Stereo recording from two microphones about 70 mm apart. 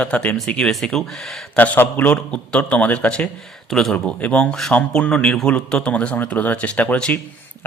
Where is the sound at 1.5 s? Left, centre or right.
Left.